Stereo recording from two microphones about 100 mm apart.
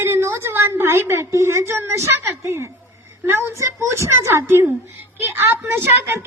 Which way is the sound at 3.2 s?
25° right (ahead or behind).